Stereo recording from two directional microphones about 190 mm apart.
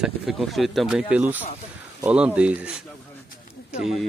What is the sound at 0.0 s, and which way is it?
Speech, centre (ahead or behind).